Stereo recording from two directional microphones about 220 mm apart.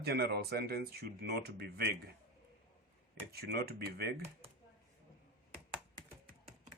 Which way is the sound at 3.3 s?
45° right (ahead or behind).